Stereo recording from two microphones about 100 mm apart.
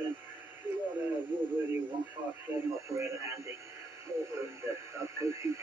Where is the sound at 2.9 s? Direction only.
25° right (ahead or behind).